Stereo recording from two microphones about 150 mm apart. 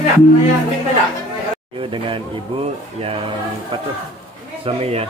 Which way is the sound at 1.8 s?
35° right (ahead or behind).